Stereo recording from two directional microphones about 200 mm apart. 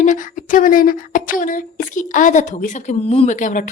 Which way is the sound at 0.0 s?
40° left (ahead or behind).